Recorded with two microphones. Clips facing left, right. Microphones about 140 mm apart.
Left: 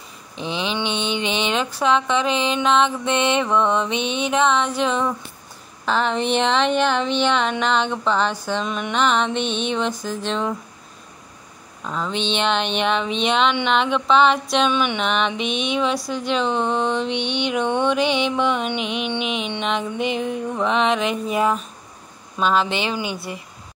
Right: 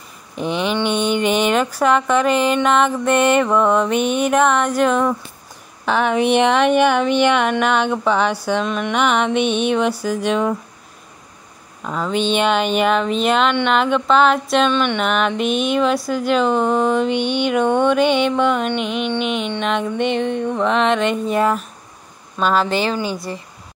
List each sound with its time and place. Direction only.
0.4 s a sound: 50° right (ahead or behind)
0.9 s a sound: 10° right (ahead or behind)
2.6 s speech: 10° right (ahead or behind)
8.6 s speech: centre (ahead or behind)
8.9 s speech: 10° right (ahead or behind)
11.8 s speech: 10° right (ahead or behind)
14.7 s music: 10° left (ahead or behind)
15.0 s speech: 5° right (ahead or behind)